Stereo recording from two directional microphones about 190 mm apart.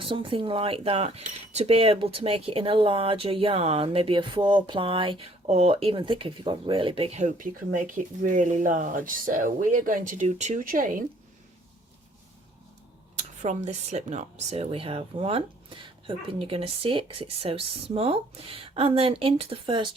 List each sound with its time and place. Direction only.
0.0 s speech: 25° right (ahead or behind); by 11.0 s 45° right (ahead or behind)
13.1 s speech: 40° right (ahead or behind)